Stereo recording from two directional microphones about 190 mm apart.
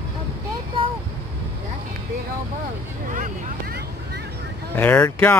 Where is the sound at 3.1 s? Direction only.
50° right (ahead or behind).